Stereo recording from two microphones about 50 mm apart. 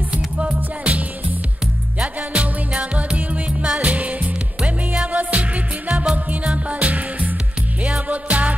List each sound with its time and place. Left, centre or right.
0.8 s music: right
2.3 s music: right